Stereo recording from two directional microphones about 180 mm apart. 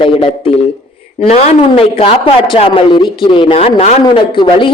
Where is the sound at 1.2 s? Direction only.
35° left (ahead or behind).